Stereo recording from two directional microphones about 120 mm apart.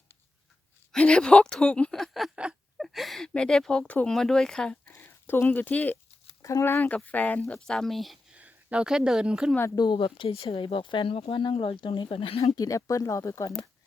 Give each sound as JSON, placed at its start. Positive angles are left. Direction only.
{"t": 0.9, "sound": "speech", "side_deg": 10}
{"t": 4.9, "sound": "speech", "side_deg": 15}
{"t": 6.4, "sound": "speech", "side_deg": 25}
{"t": 8.4, "sound": "speech", "side_deg": -10}
{"t": 9.7, "sound": "speech", "side_deg": 40}
{"t": 12.5, "sound": "speech", "side_deg": 30}